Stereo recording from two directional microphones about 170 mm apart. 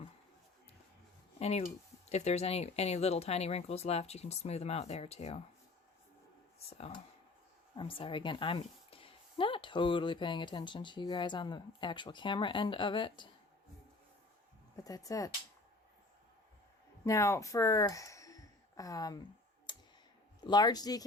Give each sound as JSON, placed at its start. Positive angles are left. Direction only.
{"t": 1.4, "sound": "speech", "side_deg": 35}
{"t": 6.7, "sound": "a woman's voice", "side_deg": 35}
{"t": 14.8, "sound": "a woman's voice", "side_deg": 20}
{"t": 17.0, "sound": "speech", "side_deg": 15}
{"t": 19.7, "sound": "computer keyboard", "side_deg": 25}
{"t": 20.5, "sound": "a woman's voice", "side_deg": 25}